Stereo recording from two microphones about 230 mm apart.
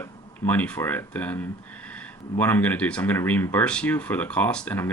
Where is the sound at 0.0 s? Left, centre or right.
Centre.